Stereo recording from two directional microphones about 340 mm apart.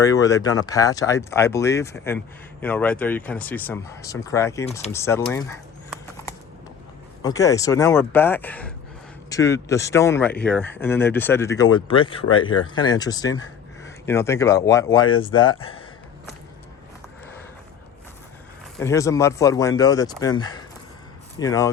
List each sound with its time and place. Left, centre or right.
0.0 s speech: centre
4.9 s a sound: centre
7.2 s speech: centre
15.4 s speech: left
18.8 s speech: centre